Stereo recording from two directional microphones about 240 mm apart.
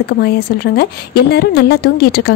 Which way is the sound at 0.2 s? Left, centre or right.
Left.